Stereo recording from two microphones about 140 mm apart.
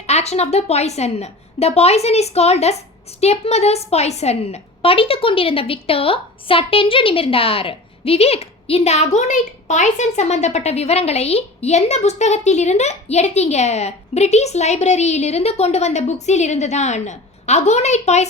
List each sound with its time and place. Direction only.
0.1 s a woman's voice: 50° left (ahead or behind)